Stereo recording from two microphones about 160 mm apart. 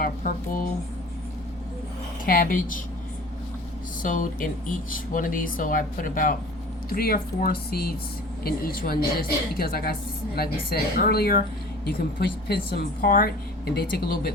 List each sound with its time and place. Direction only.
0.0 s speech: 60° left (ahead or behind)
2.2 s speech: 65° left (ahead or behind)
4.0 s a woman's voice: 55° left (ahead or behind); by 14.3 s 80° left